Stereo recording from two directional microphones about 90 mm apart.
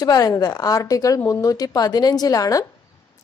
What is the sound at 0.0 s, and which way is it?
A woman's voice, 45° left (ahead or behind).